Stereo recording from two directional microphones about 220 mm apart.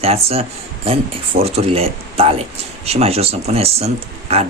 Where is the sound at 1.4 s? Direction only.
25° right (ahead or behind).